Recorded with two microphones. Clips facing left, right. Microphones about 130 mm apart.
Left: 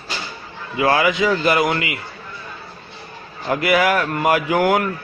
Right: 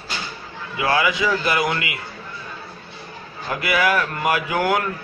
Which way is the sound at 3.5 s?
40° left (ahead or behind).